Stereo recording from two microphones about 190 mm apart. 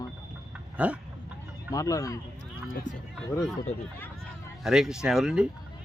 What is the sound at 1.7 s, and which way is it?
Speech, 15° left (ahead or behind).